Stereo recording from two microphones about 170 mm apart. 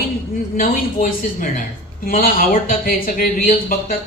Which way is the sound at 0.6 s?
55° left (ahead or behind).